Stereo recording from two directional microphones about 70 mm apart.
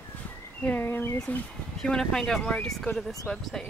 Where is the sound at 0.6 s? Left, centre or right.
Left.